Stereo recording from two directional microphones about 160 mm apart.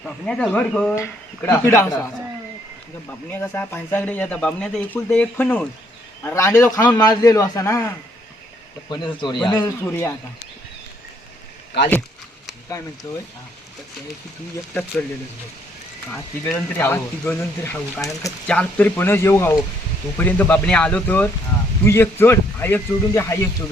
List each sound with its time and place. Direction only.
0.0 s speech: 5° left (ahead or behind)
0.9 s speech: 20° left (ahead or behind)
3.1 s a man's voice: 10° left (ahead or behind)
9.2 s a man's voice: 30° left (ahead or behind)
9.6 s speech: 15° left (ahead or behind)
13.1 s a man's voice: 20° left (ahead or behind)
14.7 s speech: 10° left (ahead or behind)
16.0 s speech: 10° left (ahead or behind)
18.4 s speech: 10° left (ahead or behind)